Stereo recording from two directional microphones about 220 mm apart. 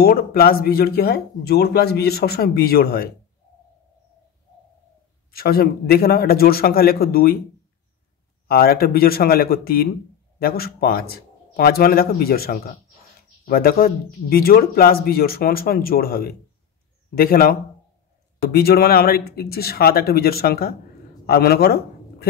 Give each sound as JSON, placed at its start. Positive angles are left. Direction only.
{"t": 0.0, "sound": "speech", "side_deg": 45}
{"t": 5.3, "sound": "speech", "side_deg": 45}
{"t": 8.5, "sound": "a man's voice", "side_deg": 45}